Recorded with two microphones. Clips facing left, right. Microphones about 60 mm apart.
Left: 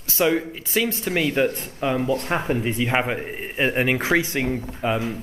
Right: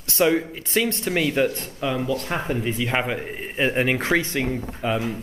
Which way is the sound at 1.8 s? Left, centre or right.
Left.